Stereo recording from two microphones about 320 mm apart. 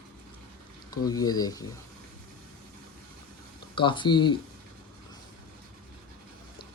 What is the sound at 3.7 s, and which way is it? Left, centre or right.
Speech, centre.